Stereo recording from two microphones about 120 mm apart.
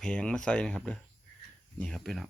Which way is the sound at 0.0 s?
10° left (ahead or behind).